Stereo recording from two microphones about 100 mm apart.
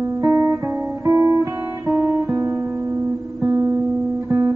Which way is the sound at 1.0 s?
35° right (ahead or behind).